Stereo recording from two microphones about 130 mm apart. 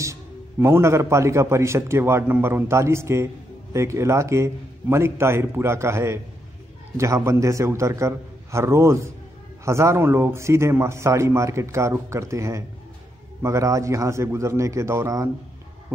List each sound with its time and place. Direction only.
0.0 s a man's voice: 20° right (ahead or behind)